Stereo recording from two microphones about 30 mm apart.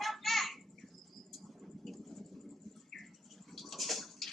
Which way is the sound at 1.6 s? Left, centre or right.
Centre.